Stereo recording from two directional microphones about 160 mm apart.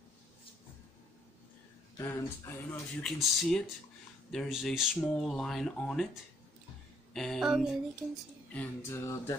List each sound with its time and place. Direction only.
2.0 s speech: 15° left (ahead or behind)
3.2 s speech: centre (ahead or behind)
7.2 s speech: centre (ahead or behind)
8.5 s speech: 15° left (ahead or behind)